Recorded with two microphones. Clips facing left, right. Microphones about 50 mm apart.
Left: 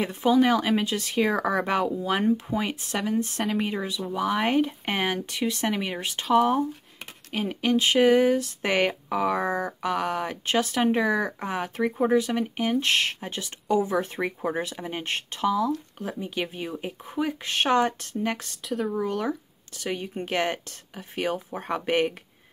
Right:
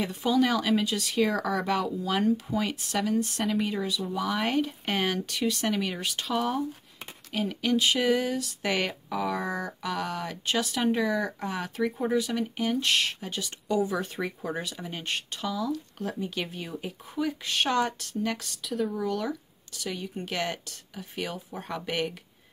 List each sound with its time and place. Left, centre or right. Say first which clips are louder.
0.0 s speech: left 4 dB; left
16.1 s speech: left 3 dB; centre
18.7 s speech: left 1 dB; centre
18.9 s speech: left 3 dB; left